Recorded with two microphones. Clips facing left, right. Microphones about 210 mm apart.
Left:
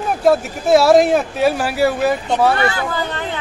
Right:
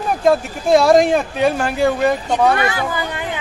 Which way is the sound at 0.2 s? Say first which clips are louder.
Left 1 dB; 5° left (ahead or behind).